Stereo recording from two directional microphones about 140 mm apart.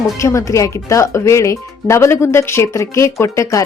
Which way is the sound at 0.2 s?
20° left (ahead or behind).